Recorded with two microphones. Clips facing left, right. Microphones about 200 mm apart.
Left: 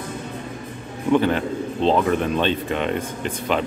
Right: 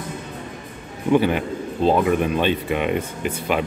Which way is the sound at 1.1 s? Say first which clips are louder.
Even; 10° right (ahead or behind).